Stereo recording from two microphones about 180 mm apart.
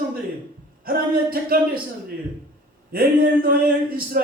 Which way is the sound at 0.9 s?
55° right (ahead or behind).